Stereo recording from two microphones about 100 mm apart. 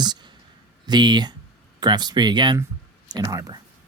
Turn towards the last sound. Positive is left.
turn(degrees=-35)  # may be behind; listen again after turning